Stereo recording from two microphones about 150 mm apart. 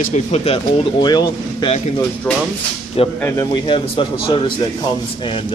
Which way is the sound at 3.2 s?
15° left (ahead or behind).